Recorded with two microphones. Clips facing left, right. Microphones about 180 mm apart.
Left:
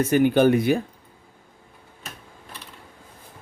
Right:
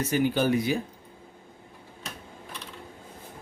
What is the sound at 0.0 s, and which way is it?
Speech, 55° left (ahead or behind).